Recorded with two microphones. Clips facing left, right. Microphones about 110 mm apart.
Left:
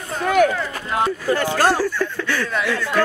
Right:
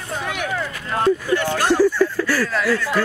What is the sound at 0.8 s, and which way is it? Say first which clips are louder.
Speech: right 3 dB; 15° left (ahead or behind).